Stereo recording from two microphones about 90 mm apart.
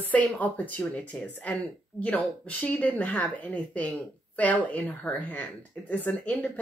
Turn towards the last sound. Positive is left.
turn(degrees=20)  # may be behind; listen again after turning